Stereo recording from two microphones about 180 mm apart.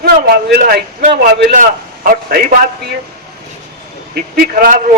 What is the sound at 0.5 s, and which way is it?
A man's voice, 50° right (ahead or behind).